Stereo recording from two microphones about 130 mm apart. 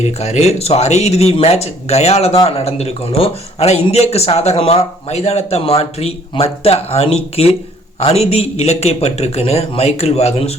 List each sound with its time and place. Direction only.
0.0 s speech: 55° left (ahead or behind)